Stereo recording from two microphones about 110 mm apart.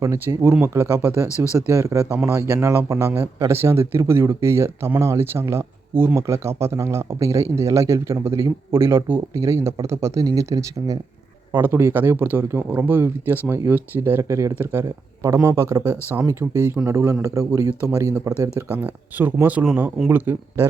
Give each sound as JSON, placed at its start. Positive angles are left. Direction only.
{"t": 0.0, "sound": "speech", "side_deg": -25}
{"t": 11.5, "sound": "speech", "side_deg": -20}
{"t": 18.7, "sound": "speech", "side_deg": -15}